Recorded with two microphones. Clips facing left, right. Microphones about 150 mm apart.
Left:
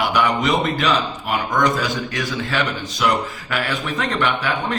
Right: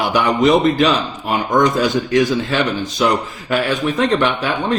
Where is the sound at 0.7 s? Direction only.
25° right (ahead or behind).